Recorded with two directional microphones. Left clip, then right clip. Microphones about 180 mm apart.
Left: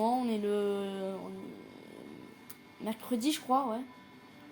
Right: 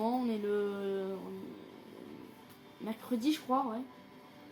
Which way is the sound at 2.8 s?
50° left (ahead or behind).